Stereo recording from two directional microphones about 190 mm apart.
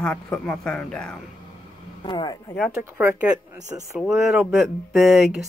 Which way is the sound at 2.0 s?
20° left (ahead or behind).